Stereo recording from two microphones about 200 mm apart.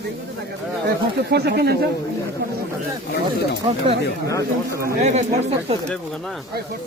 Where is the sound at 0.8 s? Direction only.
55° right (ahead or behind).